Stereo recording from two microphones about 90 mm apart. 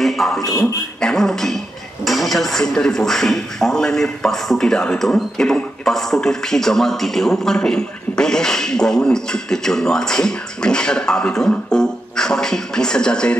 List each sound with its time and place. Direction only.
0.0 s beatboxing: centre (ahead or behind)
0.4 s speech: 40° left (ahead or behind)
1.0 s speech: 5° left (ahead or behind)